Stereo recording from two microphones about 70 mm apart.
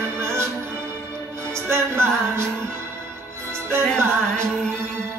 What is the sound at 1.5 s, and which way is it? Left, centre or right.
Music, right.